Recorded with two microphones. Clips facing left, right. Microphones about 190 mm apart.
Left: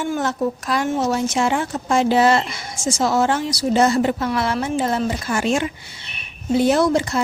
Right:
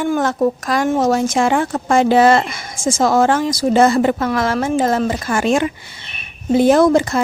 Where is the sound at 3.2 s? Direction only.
50° right (ahead or behind).